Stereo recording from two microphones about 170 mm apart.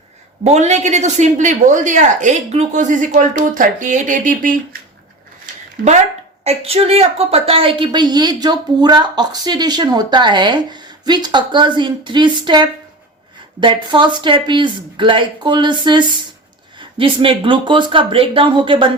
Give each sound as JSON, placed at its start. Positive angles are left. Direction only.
{"t": 0.4, "sound": "speech", "side_deg": -40}
{"t": 6.4, "sound": "a woman's voice", "side_deg": -35}